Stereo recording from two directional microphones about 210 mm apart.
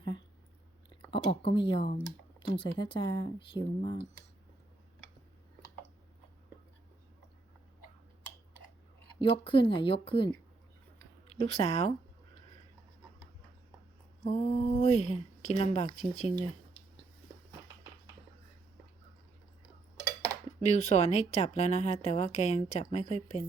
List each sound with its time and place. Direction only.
1.1 s speech: 25° left (ahead or behind)
9.1 s speech: 25° left (ahead or behind)
14.3 s a woman's voice: 30° left (ahead or behind)
20.6 s a woman's voice: 30° left (ahead or behind)